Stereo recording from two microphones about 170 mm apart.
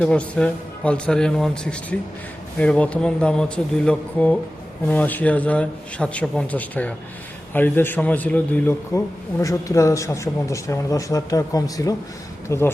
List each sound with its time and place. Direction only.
0.0 s a man's voice: 5° left (ahead or behind)